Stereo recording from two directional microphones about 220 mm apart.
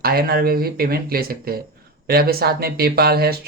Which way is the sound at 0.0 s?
45° right (ahead or behind).